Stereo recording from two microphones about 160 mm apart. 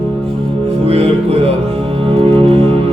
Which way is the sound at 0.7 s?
40° right (ahead or behind).